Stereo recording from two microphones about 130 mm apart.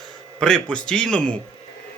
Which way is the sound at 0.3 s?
5° left (ahead or behind).